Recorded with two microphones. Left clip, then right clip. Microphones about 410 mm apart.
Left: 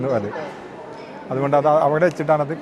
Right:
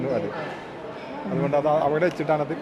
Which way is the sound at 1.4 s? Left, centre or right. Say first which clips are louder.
Left 6 dB; left.